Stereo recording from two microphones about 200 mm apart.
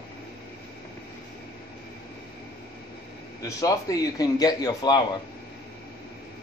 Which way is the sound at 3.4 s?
15° left (ahead or behind).